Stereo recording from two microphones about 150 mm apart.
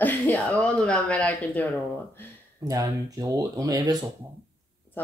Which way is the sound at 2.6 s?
25° right (ahead or behind).